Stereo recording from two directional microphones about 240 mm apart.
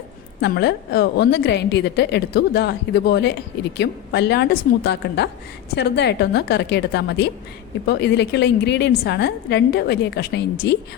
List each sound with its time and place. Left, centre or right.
0.4 s a woman's voice: left